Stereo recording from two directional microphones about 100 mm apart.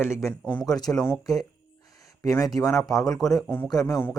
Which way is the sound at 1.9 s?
35° left (ahead or behind).